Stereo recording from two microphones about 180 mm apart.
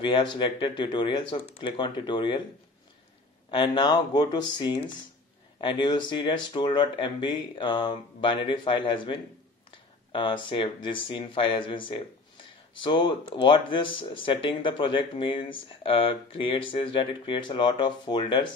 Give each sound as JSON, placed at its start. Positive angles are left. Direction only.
{"t": 0.0, "sound": "speech", "side_deg": 25}
{"t": 3.4, "sound": "speech", "side_deg": 25}